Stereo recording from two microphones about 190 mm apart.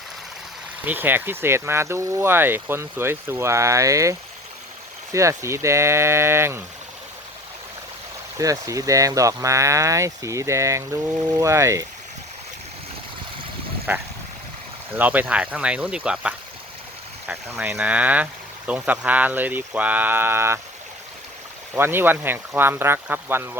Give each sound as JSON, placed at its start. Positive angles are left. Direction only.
{"t": 0.9, "sound": "speech", "side_deg": -10}
{"t": 5.1, "sound": "speech", "side_deg": -15}
{"t": 8.4, "sound": "speech", "side_deg": -15}
{"t": 13.9, "sound": "speech", "side_deg": -10}
{"t": 21.8, "sound": "speech", "side_deg": -10}